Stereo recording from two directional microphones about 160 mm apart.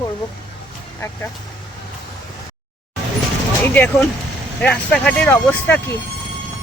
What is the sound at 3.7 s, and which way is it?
Speech, 10° left (ahead or behind).